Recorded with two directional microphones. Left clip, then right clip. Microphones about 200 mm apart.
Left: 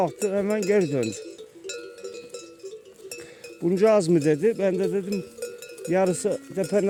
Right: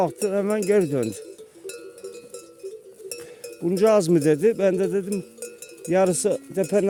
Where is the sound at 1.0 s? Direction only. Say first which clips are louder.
Even; 60° right (ahead or behind).